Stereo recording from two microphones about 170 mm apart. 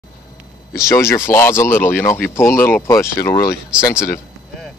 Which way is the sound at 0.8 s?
15° left (ahead or behind).